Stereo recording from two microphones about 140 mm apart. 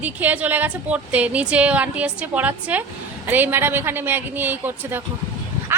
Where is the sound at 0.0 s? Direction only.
10° right (ahead or behind).